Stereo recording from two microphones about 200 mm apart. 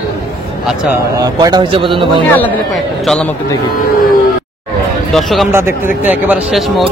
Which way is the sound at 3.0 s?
Centre (ahead or behind).